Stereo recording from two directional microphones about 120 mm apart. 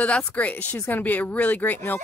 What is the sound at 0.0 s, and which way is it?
A woman's voice, 10° left (ahead or behind).